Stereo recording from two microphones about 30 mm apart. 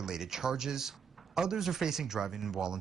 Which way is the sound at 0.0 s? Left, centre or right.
Centre.